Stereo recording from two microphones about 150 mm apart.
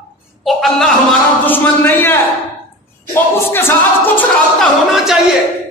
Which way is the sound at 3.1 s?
15° left (ahead or behind).